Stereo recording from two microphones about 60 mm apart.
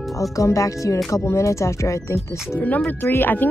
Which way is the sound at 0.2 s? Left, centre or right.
Left.